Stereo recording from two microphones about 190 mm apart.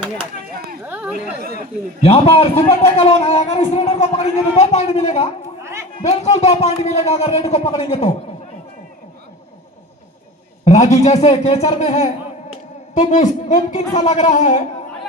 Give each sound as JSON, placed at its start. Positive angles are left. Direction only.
{"t": 0.9, "sound": "a sound", "side_deg": -10}
{"t": 2.0, "sound": "speech", "side_deg": 30}
{"t": 10.8, "sound": "speech", "side_deg": 35}